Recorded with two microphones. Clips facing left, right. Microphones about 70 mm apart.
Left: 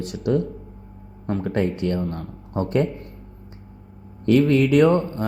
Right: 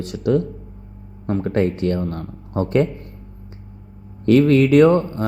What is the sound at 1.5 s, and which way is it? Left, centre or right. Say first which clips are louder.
Speech: right 4 dB; right.